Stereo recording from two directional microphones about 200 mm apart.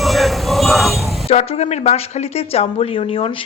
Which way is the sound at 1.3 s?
30° left (ahead or behind).